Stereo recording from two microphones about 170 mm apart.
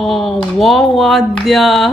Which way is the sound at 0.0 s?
Centre (ahead or behind).